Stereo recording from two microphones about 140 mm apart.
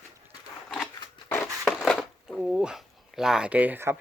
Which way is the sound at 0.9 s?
30° left (ahead or behind).